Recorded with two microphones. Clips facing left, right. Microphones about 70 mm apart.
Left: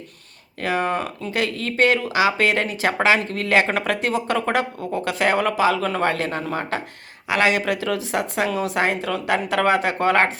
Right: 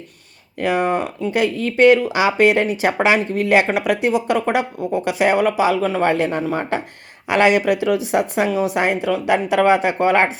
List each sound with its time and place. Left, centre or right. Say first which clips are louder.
0.6 s a woman's voice: right 4 dB; centre